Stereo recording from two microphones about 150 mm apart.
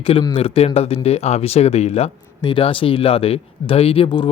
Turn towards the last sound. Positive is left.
turn(degrees=35)  # may be behind; listen again after turning